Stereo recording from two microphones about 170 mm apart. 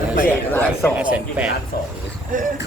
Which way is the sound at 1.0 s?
5° right (ahead or behind).